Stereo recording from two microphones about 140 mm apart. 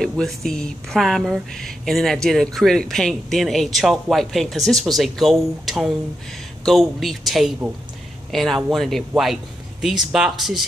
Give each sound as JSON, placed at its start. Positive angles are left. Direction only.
{"t": 0.0, "sound": "speech", "side_deg": 5}